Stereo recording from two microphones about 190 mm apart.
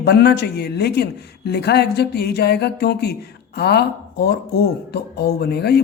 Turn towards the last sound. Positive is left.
turn(degrees=55)  # may be behind; listen again after turning